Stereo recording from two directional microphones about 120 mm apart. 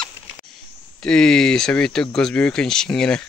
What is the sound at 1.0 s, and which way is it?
Speech, 5° left (ahead or behind).